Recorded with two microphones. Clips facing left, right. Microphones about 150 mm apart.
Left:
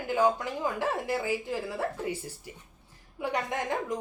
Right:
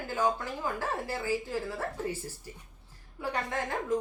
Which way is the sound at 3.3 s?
15° left (ahead or behind).